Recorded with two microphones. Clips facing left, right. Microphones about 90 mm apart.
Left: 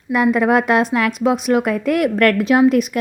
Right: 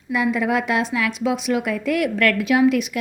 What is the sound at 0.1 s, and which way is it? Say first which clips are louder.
A woman's voice: left 6 dB; 50° left (ahead or behind).